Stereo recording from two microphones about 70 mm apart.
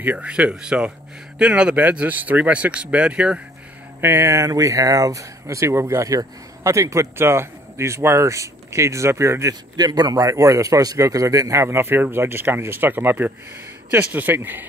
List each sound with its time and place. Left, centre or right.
0.0 s speech: right
0.3 s speech: centre
4.0 s speech: right
9.5 s speech: right
11.5 s speech: right